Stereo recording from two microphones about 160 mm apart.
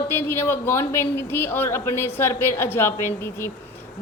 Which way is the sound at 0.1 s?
15° left (ahead or behind).